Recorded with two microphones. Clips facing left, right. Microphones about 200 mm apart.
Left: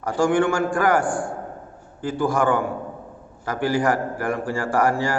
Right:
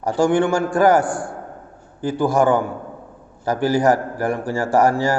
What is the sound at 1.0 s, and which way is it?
Speech, 5° right (ahead or behind).